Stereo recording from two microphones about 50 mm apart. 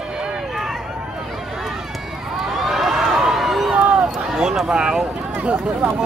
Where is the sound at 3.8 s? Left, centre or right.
Right.